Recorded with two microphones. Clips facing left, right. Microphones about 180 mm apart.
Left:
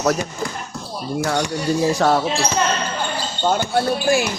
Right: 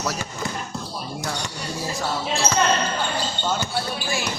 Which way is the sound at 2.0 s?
80° left.